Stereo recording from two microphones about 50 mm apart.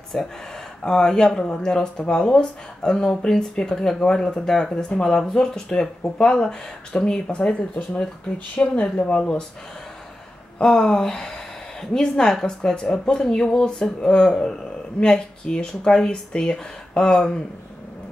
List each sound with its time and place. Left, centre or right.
0.1 s speech: centre; by 9.4 s left
10.6 s speech: centre